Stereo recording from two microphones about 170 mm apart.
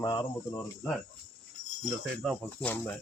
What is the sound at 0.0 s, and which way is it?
Speech, 20° left (ahead or behind).